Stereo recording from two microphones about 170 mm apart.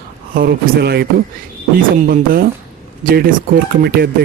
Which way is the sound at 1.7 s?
55° right (ahead or behind).